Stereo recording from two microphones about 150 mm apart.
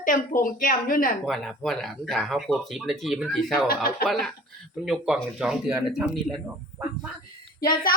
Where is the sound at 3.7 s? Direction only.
75° left (ahead or behind).